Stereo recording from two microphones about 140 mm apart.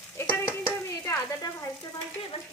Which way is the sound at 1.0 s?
20° left (ahead or behind).